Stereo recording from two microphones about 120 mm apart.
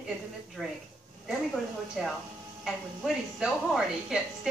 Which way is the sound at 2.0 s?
Centre (ahead or behind).